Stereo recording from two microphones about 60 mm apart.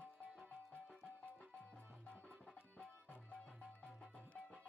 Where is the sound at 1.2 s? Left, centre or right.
Centre.